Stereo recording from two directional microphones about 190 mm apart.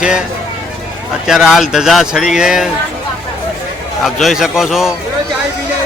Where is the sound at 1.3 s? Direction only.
Centre (ahead or behind).